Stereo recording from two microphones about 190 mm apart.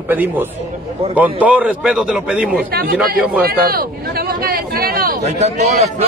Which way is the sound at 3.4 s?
50° right (ahead or behind).